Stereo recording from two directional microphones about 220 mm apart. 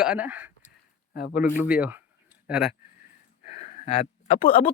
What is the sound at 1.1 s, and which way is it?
Speech, 45° left (ahead or behind).